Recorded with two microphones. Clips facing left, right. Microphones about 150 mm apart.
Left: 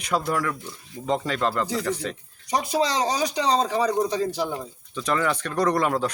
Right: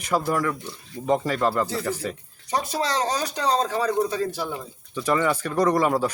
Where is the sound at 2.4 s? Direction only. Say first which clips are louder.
Left 2 dB; 15° left (ahead or behind).